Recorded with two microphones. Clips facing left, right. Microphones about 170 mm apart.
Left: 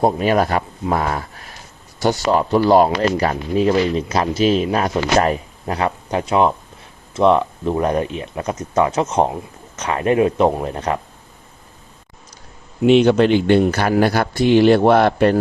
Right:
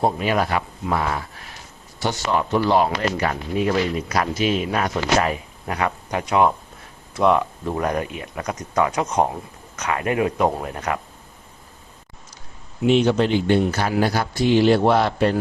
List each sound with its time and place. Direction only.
0.0 s speech: 40° left (ahead or behind)
12.8 s a man's voice: 70° left (ahead or behind)